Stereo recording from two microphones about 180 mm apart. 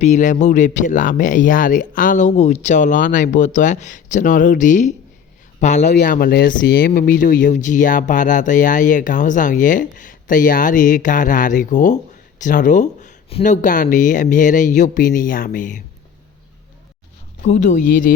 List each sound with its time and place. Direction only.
0.0 s speech: 40° left (ahead or behind)
5.8 s speech: 70° left (ahead or behind); by 15.8 s 45° left (ahead or behind)
17.4 s speech: 40° left (ahead or behind)